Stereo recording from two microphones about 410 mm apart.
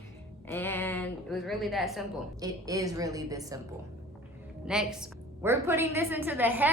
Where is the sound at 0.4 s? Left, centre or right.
Centre.